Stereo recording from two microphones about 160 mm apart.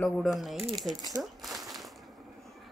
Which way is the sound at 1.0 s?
25° right (ahead or behind).